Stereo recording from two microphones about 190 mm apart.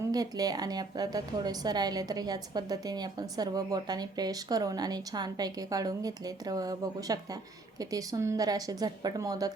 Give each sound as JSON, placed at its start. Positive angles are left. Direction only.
{"t": 0.1, "sound": "a woman's voice", "side_deg": -20}